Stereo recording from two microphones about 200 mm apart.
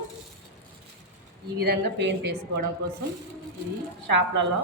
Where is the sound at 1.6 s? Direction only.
55° right (ahead or behind).